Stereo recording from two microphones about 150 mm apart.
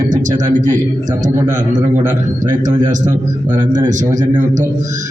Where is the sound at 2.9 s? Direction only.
55° right (ahead or behind).